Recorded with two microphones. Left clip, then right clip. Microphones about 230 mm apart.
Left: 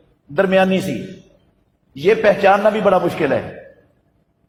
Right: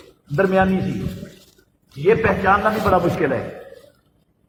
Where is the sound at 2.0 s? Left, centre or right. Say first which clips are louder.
Left 4 dB; left.